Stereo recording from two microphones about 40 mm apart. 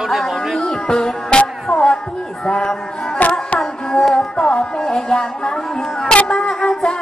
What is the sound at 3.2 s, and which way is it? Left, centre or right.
Music, left.